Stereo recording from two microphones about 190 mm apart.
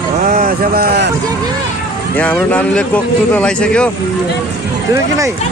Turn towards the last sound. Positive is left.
turn(degrees=5)  # may be behind; listen again after turning